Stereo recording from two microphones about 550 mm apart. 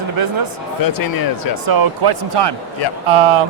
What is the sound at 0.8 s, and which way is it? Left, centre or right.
Speech, left.